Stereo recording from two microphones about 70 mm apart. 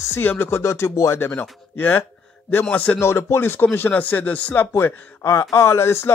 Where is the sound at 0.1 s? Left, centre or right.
Left.